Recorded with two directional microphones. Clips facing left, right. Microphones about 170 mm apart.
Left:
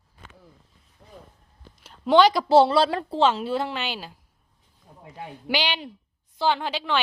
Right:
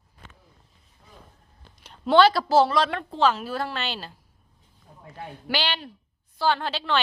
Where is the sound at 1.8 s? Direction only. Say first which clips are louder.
Left 1 dB; 5° left (ahead or behind).